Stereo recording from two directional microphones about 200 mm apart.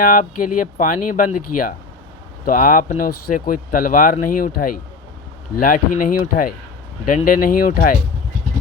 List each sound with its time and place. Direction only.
0.0 s speech: 45° left (ahead or behind)